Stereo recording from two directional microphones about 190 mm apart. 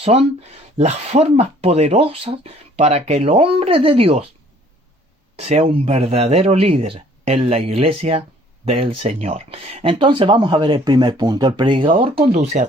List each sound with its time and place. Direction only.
0.0 s speech: 35° right (ahead or behind)
5.4 s speech: 35° right (ahead or behind)